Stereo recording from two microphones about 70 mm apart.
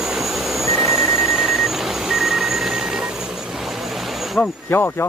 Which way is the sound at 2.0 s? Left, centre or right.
Centre.